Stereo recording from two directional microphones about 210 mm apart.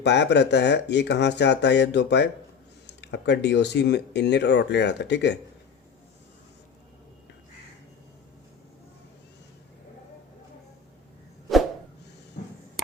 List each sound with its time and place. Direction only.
0.0 s speech: 55° left (ahead or behind)